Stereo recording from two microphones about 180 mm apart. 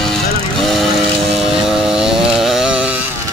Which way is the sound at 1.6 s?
5° right (ahead or behind).